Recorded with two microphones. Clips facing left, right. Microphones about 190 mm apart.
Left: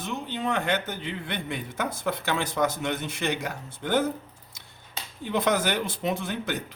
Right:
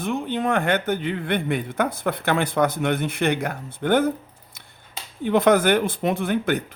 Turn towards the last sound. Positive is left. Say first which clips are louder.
# right 7 dB
turn(degrees=-55)  # may be behind; listen again after turning